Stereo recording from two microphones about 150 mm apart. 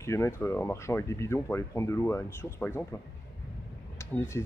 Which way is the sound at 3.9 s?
15° left (ahead or behind).